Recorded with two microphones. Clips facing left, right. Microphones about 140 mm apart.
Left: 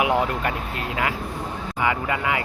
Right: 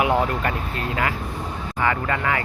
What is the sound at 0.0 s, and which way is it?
Speech, 10° left (ahead or behind).